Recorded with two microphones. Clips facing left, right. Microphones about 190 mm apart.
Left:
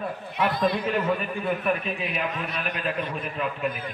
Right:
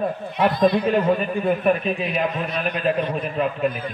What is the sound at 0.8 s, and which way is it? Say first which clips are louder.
A man's voice: right 6 dB; 35° right (ahead or behind).